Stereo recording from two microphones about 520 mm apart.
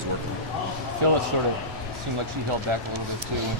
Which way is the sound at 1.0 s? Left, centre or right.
Right.